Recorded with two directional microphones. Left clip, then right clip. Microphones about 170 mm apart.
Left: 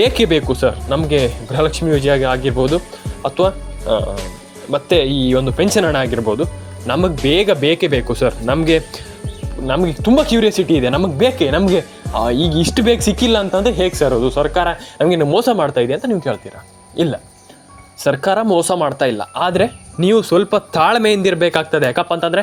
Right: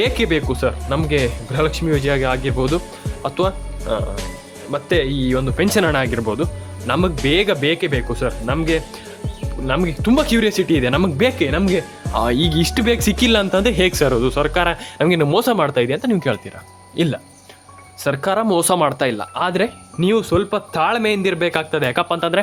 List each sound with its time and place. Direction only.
0.0 s speech: 15° left (ahead or behind)
9.6 s speech: centre (ahead or behind)
18.0 s speech: 5° left (ahead or behind)